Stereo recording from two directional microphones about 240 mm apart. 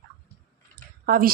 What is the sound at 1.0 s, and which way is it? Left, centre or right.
Speech, right.